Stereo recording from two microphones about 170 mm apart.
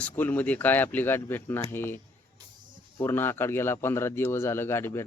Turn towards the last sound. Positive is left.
turn(degrees=15)  # may be behind; listen again after turning